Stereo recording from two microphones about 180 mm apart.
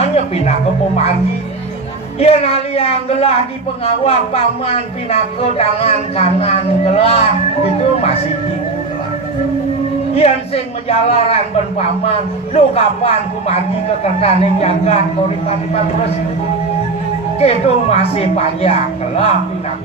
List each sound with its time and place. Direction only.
0.1 s speech: 35° left (ahead or behind)
2.1 s speech: 35° left (ahead or behind)
10.1 s speech: 35° left (ahead or behind)
17.4 s speech: 35° left (ahead or behind)